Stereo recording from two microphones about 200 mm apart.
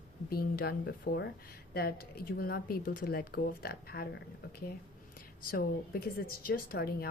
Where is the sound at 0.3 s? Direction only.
50° left (ahead or behind).